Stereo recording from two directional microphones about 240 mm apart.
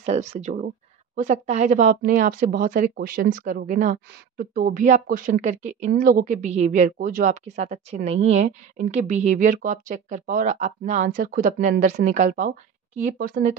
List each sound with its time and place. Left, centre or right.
0.0 s a woman's voice: right